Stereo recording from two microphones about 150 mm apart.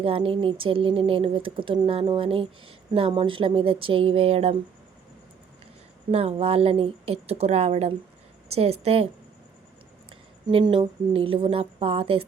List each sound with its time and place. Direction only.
0.0 s speech: 40° right (ahead or behind)
6.1 s a woman's voice: 40° right (ahead or behind)
10.4 s speech: 35° right (ahead or behind)